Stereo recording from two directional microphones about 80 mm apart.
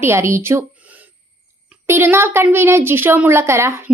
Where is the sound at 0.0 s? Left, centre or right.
Right.